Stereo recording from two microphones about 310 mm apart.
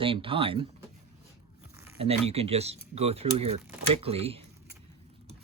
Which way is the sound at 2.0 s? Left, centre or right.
Centre.